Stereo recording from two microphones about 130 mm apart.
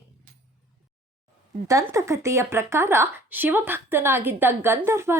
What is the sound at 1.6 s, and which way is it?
Speech, 25° right (ahead or behind).